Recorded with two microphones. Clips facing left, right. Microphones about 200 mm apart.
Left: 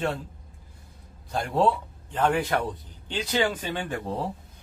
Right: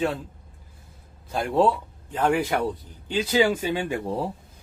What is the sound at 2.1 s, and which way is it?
Speech, 10° right (ahead or behind).